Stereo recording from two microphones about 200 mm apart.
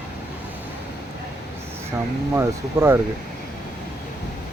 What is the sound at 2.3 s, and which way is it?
Speech, 10° right (ahead or behind).